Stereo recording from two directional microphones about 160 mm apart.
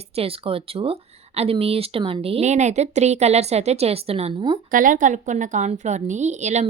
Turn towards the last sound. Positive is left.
turn(degrees=-45)  # may be behind; listen again after turning